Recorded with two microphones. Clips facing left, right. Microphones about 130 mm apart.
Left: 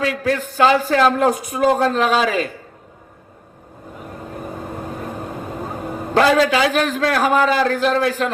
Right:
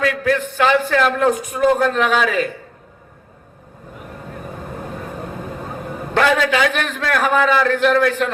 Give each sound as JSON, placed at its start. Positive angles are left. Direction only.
{"t": 0.0, "sound": "a man's voice", "side_deg": 35}
{"t": 6.1, "sound": "a man's voice", "side_deg": 35}